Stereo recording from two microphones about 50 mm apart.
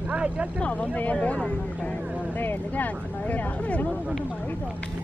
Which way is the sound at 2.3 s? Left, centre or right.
Left.